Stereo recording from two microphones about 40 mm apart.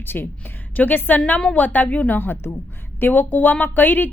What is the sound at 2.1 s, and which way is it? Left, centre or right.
Speech, left.